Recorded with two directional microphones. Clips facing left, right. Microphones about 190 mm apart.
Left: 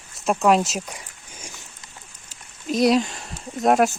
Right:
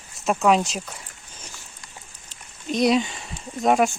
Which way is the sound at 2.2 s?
Centre (ahead or behind).